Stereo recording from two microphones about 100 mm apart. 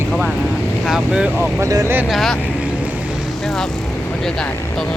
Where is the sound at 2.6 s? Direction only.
10° right (ahead or behind).